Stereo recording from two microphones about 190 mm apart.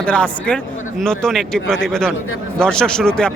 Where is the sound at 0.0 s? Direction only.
5° left (ahead or behind).